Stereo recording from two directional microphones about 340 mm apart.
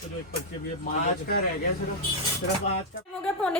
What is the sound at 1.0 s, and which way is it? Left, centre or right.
Speech, left.